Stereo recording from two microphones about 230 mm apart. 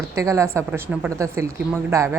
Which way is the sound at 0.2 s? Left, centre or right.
Centre.